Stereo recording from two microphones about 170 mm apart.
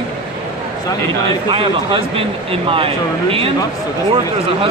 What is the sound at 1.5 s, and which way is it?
Speech, 30° right (ahead or behind).